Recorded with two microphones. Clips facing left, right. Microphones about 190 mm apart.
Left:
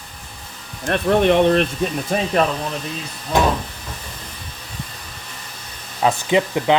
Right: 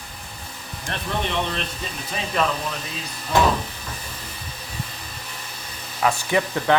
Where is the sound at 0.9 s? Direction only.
55° left (ahead or behind).